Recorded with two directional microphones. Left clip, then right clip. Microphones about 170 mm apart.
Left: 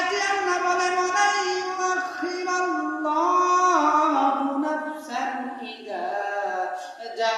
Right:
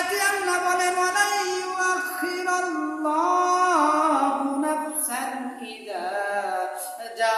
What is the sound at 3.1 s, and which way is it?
Music, 10° right (ahead or behind).